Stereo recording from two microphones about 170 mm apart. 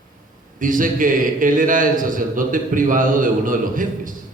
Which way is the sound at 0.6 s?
50° right (ahead or behind).